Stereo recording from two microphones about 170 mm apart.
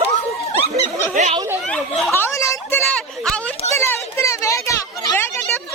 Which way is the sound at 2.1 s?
15° left (ahead or behind).